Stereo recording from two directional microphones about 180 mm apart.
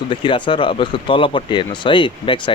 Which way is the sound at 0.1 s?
25° left (ahead or behind).